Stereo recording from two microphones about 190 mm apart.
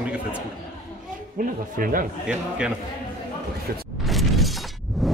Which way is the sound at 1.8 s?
45° right (ahead or behind).